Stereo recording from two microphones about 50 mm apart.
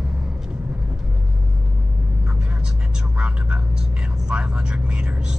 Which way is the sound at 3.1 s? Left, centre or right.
Right.